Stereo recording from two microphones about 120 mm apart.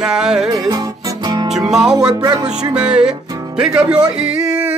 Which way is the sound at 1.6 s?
5° right (ahead or behind).